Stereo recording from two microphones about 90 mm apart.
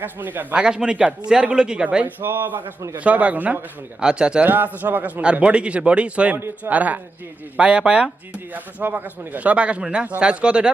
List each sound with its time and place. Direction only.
0.0 s a man's voice: 20° right (ahead or behind)
0.5 s a man's voice: 10° right (ahead or behind)
4.4 s speech: 20° right (ahead or behind)